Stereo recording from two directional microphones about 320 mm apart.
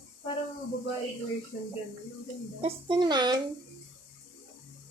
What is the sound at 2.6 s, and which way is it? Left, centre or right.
Speech, centre.